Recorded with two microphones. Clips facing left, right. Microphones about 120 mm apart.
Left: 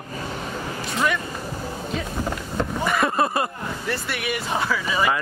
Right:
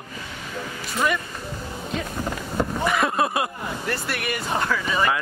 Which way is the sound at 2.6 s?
Centre (ahead or behind).